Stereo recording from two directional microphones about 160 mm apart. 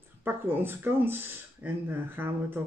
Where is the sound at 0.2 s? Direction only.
15° right (ahead or behind).